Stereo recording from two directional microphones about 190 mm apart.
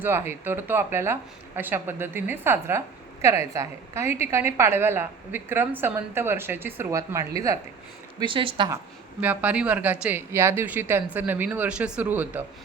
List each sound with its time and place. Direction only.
0.0 s speech: 10° right (ahead or behind)
9.2 s speech: 10° right (ahead or behind)